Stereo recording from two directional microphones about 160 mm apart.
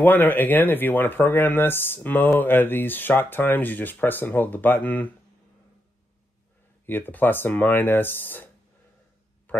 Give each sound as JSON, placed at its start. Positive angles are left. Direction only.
{"t": 0.0, "sound": "speech", "side_deg": 10}
{"t": 6.9, "sound": "speech", "side_deg": 10}
{"t": 9.5, "sound": "a sound", "side_deg": 10}